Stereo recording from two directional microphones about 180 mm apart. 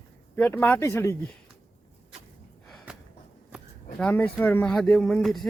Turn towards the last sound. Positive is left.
turn(degrees=0)  # may be behind; listen again after turning